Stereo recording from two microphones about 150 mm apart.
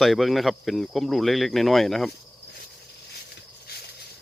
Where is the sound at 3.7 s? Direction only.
90° left.